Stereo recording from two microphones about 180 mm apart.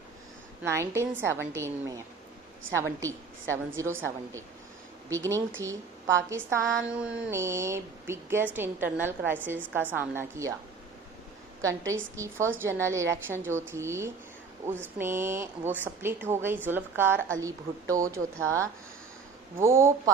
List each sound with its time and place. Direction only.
0.6 s a woman's voice: 15° right (ahead or behind)
11.6 s a woman's voice: 15° right (ahead or behind)